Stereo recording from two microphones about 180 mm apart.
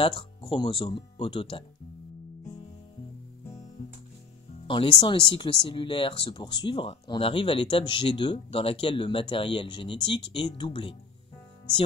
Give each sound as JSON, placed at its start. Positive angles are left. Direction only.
{"t": 0.0, "sound": "speech", "side_deg": 30}
{"t": 4.6, "sound": "speech", "side_deg": 30}